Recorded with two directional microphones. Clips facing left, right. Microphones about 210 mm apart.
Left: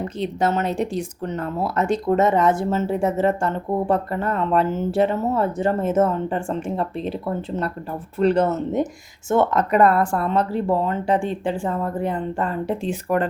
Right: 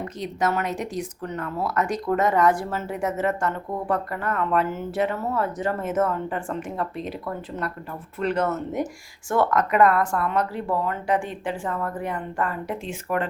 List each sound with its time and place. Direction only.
0.0 s speech: 30° left (ahead or behind)